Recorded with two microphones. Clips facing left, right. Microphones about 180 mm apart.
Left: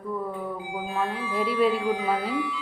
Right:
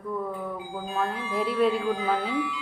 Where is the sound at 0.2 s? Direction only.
Centre (ahead or behind).